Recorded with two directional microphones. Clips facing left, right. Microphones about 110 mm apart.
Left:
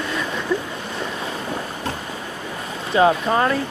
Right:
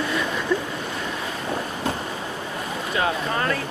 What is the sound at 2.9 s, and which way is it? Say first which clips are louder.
Speech: left 8 dB; 25° left (ahead or behind).